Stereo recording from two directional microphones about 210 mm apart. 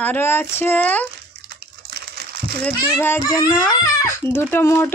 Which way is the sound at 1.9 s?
50° right (ahead or behind).